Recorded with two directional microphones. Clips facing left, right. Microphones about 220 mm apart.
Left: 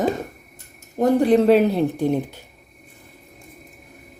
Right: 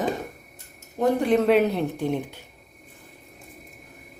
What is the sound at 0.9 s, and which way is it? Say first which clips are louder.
Speech: left 5 dB; 35° left (ahead or behind).